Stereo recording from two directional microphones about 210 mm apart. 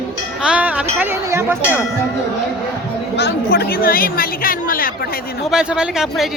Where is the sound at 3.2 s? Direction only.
50° left (ahead or behind).